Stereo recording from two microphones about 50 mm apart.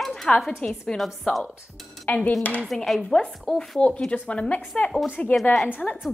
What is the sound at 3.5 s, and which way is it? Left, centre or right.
Speech, centre.